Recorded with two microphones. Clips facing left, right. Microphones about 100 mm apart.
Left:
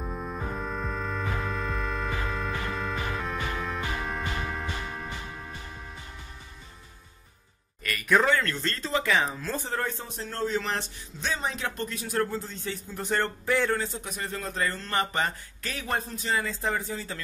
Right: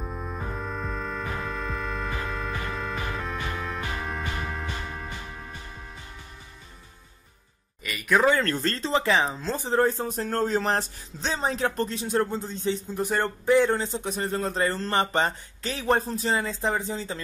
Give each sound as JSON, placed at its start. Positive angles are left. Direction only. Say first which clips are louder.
{"t": 0.0, "sound": "music", "louder": "even", "side_deg": 0}
{"t": 8.2, "sound": "speech", "louder": "right 3 dB", "side_deg": -5}
{"t": 8.5, "sound": "a man's voice", "louder": "right 4 dB", "side_deg": -40}
{"t": 9.8, "sound": "a man's voice", "louder": "right 9 dB", "side_deg": -40}